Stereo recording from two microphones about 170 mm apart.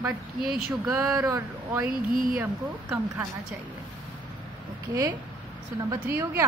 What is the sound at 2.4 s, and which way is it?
Speech, 15° right (ahead or behind).